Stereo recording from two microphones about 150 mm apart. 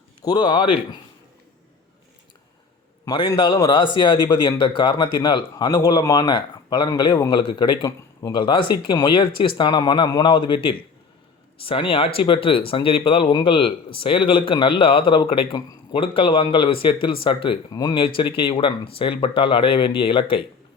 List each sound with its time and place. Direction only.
0.3 s speech: 30° left (ahead or behind)
3.1 s speech: 30° left (ahead or behind)